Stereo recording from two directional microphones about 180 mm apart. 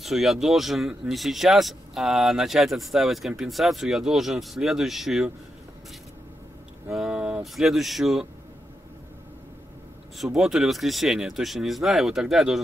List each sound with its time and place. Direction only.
0.0 s speech: centre (ahead or behind)
6.9 s speech: 5° right (ahead or behind)
10.1 s speech: centre (ahead or behind)